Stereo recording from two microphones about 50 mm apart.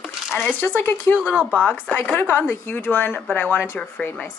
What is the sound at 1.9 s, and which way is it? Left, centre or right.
Speech, left.